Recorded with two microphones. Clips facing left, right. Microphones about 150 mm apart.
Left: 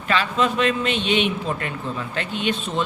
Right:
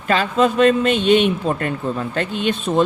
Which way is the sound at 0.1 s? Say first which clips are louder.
Right 5 dB; 45° right (ahead or behind).